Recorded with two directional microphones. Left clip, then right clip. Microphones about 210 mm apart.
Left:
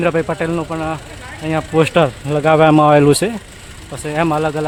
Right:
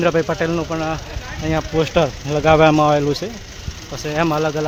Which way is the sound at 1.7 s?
25° left (ahead or behind).